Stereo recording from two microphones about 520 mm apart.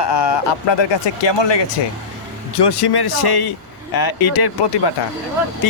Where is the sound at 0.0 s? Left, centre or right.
Left.